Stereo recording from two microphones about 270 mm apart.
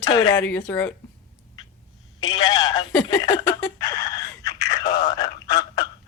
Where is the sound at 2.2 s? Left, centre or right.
Centre.